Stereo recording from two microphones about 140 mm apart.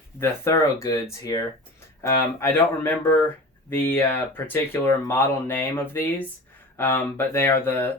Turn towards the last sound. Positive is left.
turn(degrees=15)  # may be behind; listen again after turning